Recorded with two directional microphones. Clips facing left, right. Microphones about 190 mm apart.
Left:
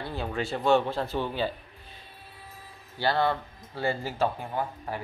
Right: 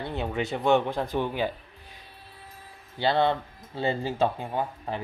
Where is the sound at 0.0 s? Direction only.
20° right (ahead or behind).